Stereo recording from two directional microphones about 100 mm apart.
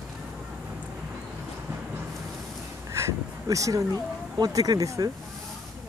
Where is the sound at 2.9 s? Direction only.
30° right (ahead or behind).